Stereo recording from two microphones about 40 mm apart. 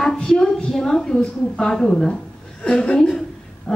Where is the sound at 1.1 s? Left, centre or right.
Left.